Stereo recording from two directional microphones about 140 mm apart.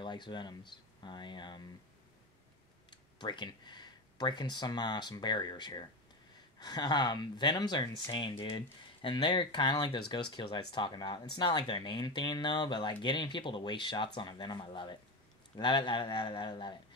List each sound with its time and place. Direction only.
0.0 s speech: 35° left (ahead or behind)
2.9 s speech: 30° left (ahead or behind)